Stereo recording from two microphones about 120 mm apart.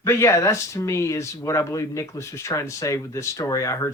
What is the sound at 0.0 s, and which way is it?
A man's voice, 20° left (ahead or behind).